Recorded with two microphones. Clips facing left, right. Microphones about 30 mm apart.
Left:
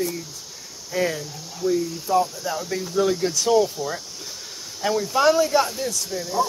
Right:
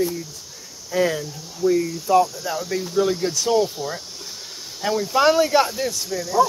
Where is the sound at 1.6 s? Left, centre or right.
Left.